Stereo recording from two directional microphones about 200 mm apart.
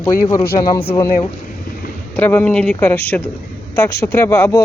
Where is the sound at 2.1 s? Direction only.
10° left (ahead or behind).